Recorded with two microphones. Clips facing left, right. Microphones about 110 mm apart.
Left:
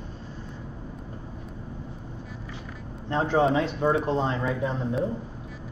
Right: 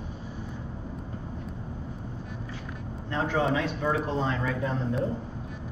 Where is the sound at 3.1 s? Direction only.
30° left (ahead or behind).